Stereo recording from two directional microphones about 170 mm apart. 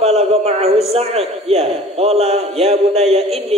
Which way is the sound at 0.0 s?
35° right (ahead or behind).